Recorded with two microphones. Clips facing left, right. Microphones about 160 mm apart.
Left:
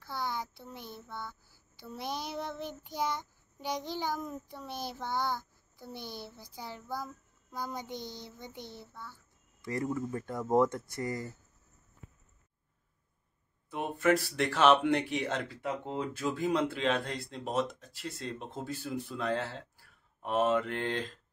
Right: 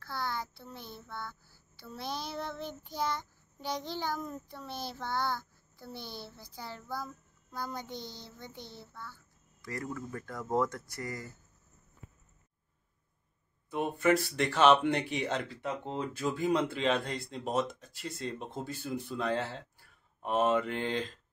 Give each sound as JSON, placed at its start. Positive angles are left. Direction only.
{"t": 0.0, "sound": "child singing", "side_deg": 15}
{"t": 13.7, "sound": "speech", "side_deg": 0}